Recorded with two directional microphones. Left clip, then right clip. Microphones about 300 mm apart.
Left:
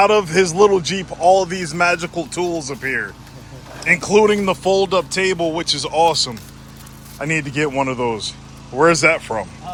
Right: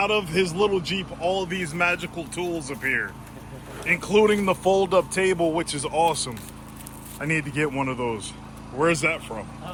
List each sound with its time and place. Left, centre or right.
0.0 s speech: left